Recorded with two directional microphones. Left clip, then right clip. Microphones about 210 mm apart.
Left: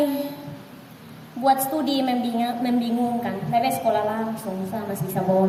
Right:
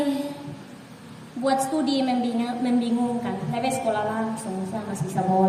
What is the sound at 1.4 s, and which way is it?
A woman's voice, 20° left (ahead or behind).